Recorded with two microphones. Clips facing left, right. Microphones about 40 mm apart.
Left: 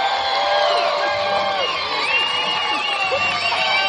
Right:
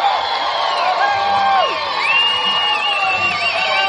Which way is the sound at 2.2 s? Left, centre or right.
Right.